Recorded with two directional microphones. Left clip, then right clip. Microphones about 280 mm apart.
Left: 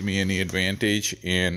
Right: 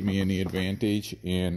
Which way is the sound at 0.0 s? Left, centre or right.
Left.